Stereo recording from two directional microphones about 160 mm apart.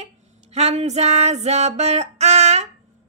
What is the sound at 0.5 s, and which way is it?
Female singing, 40° right (ahead or behind).